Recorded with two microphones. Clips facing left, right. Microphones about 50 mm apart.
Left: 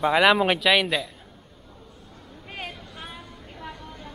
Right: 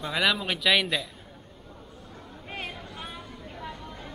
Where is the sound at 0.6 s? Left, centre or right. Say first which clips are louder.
Left 3 dB; centre.